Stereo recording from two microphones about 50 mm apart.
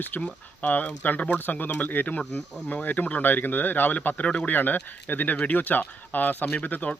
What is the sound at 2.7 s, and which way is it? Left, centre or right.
Speech, left.